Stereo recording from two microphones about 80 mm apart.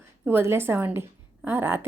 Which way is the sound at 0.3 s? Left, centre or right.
Right.